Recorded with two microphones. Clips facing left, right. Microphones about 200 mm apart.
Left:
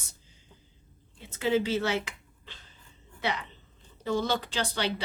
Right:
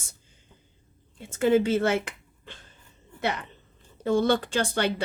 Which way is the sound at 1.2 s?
50° right (ahead or behind).